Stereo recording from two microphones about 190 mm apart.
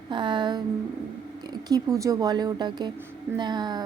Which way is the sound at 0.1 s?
25° right (ahead or behind).